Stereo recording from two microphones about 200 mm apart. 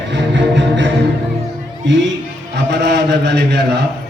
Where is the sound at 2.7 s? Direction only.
60° right (ahead or behind).